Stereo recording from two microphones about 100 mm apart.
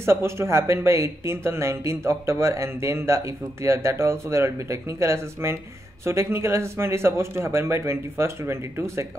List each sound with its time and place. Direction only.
0.0 s speech: 25° right (ahead or behind)